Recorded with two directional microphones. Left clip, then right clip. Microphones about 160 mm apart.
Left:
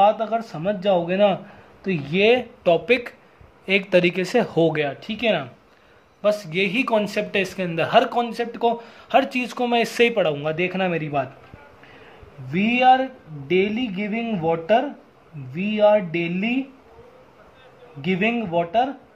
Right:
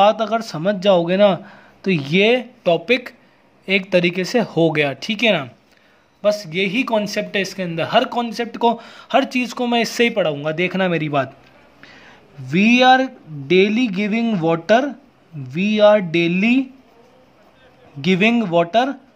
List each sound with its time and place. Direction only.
0.0 s speech: 30° right (ahead or behind)
4.7 s speech: 35° right (ahead or behind)
6.2 s speech: 25° right (ahead or behind)
12.4 s speech: 30° right (ahead or behind)
18.0 s speech: 30° right (ahead or behind)